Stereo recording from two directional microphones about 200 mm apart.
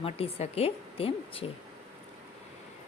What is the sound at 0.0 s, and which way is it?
Speech, 30° left (ahead or behind).